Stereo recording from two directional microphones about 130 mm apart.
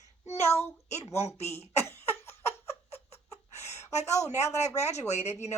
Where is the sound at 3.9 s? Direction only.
60° left (ahead or behind).